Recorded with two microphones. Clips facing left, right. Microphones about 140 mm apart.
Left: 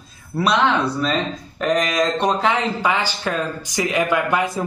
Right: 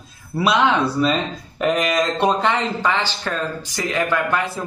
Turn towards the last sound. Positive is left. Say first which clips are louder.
# left 2 dB
turn(degrees=15)  # may be behind; listen again after turning